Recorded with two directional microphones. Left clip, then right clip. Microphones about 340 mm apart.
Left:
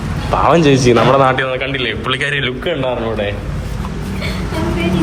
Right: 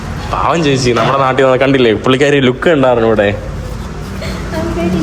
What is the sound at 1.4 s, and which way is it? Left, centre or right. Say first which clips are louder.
Speech: right 9 dB; right.